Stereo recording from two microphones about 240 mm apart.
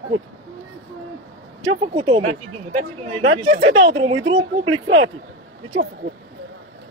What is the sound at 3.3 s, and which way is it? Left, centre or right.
Speech, right.